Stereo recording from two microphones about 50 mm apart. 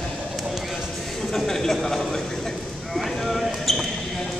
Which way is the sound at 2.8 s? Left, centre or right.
Centre.